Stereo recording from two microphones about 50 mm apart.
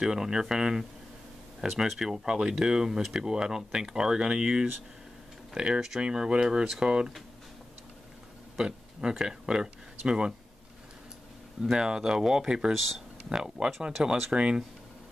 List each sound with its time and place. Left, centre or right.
0.0 s speech: centre
8.5 s speech: centre
11.6 s speech: centre
12.7 s speech: centre
13.3 s speech: centre
14.3 s speech: right